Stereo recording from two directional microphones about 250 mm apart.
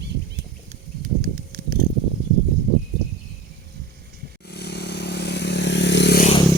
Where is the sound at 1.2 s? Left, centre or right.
Right.